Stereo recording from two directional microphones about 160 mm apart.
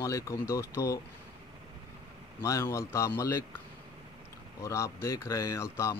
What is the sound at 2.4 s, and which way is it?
Speech, 15° left (ahead or behind).